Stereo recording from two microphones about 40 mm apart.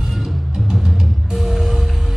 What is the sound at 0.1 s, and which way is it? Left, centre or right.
Music, centre.